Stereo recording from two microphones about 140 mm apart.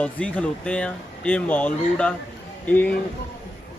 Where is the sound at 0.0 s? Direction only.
10° left (ahead or behind).